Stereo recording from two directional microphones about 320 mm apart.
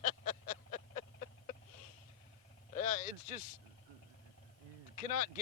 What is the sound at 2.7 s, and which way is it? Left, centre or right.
Speech, left.